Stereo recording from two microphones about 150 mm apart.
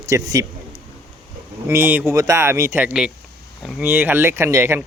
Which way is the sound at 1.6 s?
15° right (ahead or behind).